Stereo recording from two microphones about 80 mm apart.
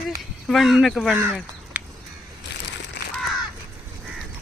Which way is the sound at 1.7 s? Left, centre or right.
Centre.